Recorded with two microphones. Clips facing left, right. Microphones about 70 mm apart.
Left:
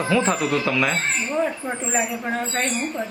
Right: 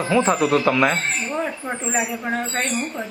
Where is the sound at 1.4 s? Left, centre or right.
Centre.